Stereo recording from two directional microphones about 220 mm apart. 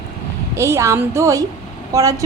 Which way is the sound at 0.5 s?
10° right (ahead or behind).